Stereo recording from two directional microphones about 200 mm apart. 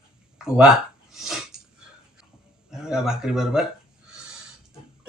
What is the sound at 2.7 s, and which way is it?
Speech, 5° right (ahead or behind).